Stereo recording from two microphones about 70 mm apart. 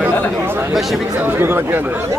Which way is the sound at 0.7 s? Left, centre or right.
Centre.